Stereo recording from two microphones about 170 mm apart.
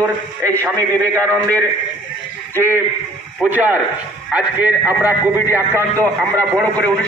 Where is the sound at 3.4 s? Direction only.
10° right (ahead or behind).